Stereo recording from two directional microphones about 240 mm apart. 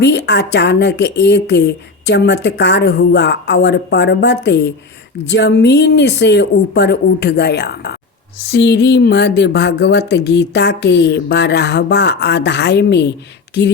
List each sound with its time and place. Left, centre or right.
0.0 s a woman's voice: left